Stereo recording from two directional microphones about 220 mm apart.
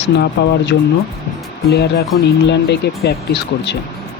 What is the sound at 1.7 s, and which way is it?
Speech, 45° left (ahead or behind).